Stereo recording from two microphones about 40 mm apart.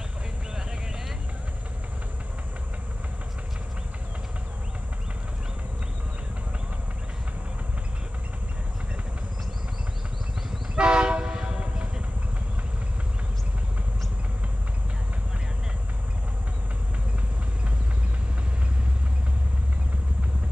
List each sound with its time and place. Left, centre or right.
10.8 s train: right